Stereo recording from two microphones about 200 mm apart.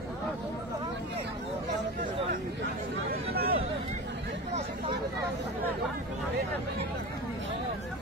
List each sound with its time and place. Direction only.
3.1 s chatter: 50° right (ahead or behind)